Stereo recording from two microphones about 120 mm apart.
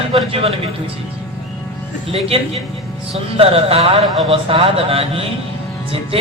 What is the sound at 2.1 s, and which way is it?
A man's voice, 55° right (ahead or behind).